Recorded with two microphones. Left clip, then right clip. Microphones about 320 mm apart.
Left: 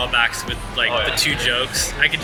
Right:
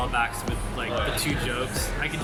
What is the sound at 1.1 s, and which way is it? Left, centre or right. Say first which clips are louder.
Speech: left 9 dB; centre.